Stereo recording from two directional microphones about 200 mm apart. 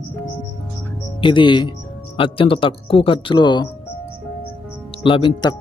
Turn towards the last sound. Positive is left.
turn(degrees=20)  # may be behind; listen again after turning